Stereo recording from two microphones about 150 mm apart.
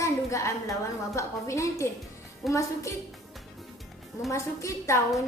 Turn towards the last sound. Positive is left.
turn(degrees=20)  # may be behind; listen again after turning